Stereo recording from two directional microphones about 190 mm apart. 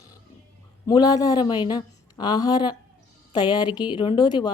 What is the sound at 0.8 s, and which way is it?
Speech, 20° left (ahead or behind).